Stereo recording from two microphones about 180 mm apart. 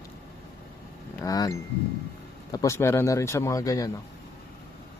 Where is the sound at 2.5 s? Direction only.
15° left (ahead or behind).